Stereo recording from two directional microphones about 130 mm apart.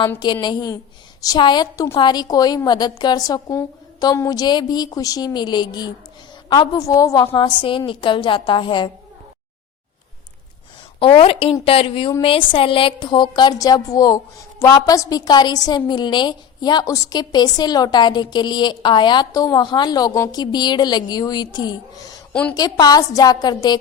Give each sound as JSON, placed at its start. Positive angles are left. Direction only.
{"t": 0.4, "sound": "a woman's voice", "side_deg": 30}
{"t": 11.0, "sound": "a woman's voice", "side_deg": 45}
{"t": 22.3, "sound": "a woman's voice", "side_deg": 10}
{"t": 22.5, "sound": "a woman's voice", "side_deg": 30}